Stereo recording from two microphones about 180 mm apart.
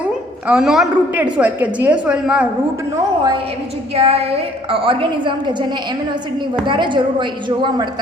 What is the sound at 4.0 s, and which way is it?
A woman's voice, 35° right (ahead or behind).